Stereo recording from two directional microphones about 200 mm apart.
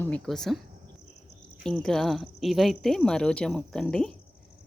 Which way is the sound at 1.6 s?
Centre (ahead or behind).